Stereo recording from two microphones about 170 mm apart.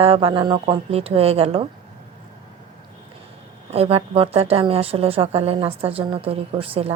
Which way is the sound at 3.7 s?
35° right (ahead or behind).